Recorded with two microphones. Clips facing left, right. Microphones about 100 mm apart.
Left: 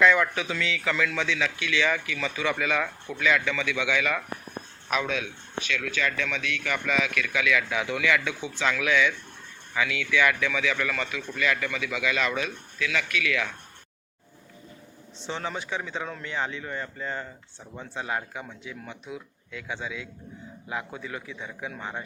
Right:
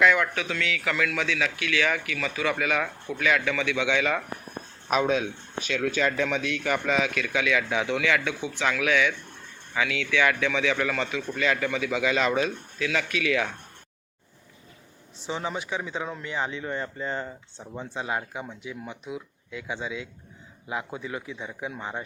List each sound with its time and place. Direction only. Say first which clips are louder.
0.0 s speech: left 1 dB; centre (ahead or behind); by 4.2 s 20° right (ahead or behind)
4.9 s a man's voice: right 5 dB; 35° right (ahead or behind)
15.3 s a man's voice: right 1 dB; 15° right (ahead or behind)